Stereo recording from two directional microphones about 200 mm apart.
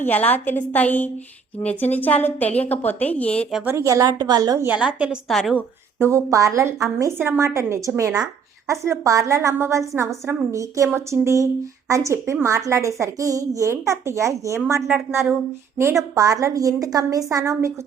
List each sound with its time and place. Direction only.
0.1 s a woman's voice: 10° left (ahead or behind)
3.7 s a woman's voice: 15° right (ahead or behind); by 5.6 s centre (ahead or behind)
6.0 s a woman's voice: 15° right (ahead or behind)